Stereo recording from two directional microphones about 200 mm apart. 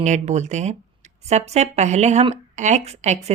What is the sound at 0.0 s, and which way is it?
Speech, 35° right (ahead or behind).